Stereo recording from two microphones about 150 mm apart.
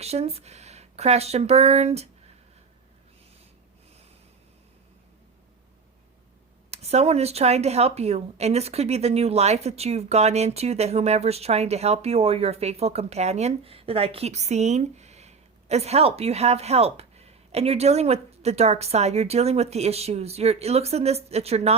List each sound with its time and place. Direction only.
0.0 s speech: 45° right (ahead or behind)
6.7 s a woman's voice: 45° right (ahead or behind)